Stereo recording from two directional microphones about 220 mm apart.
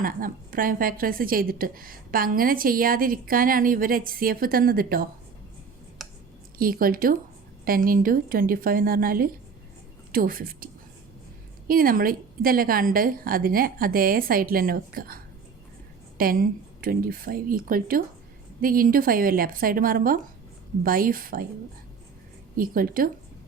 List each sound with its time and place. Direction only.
0.0 s a woman's voice: 40° right (ahead or behind)
6.0 s a sound: centre (ahead or behind)
6.6 s a woman's voice: 40° right (ahead or behind)
11.7 s a woman's voice: 40° right (ahead or behind)
22.5 s a woman's voice: 40° right (ahead or behind)